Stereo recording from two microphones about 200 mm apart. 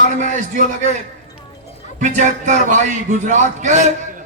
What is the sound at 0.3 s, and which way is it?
Speech, 40° right (ahead or behind).